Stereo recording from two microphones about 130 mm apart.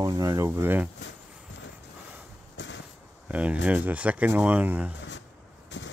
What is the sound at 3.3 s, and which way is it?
Speech, 10° right (ahead or behind).